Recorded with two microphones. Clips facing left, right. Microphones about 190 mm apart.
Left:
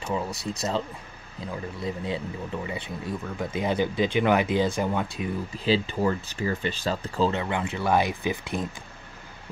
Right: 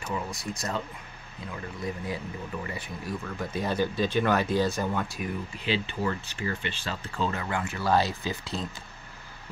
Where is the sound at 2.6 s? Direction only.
25° left (ahead or behind).